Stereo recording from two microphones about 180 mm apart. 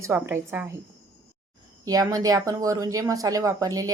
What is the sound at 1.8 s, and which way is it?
Speech, 20° right (ahead or behind).